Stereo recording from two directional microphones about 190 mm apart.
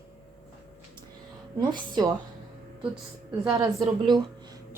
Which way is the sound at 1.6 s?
25° right (ahead or behind).